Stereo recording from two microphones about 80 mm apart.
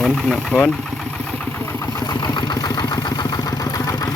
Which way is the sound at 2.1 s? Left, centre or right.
Left.